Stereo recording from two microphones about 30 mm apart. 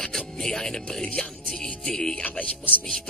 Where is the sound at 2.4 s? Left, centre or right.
Left.